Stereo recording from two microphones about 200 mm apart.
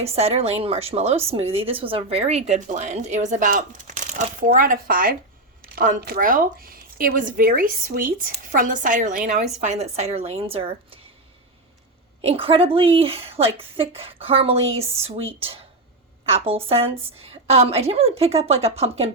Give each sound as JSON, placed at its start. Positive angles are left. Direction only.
{"t": 0.0, "sound": "a woman's voice", "side_deg": -30}
{"t": 12.2, "sound": "a woman's voice", "side_deg": -30}